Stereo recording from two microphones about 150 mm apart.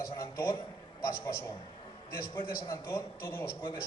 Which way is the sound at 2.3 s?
15° left (ahead or behind).